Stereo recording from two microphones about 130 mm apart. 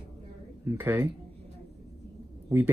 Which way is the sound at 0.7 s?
15° right (ahead or behind).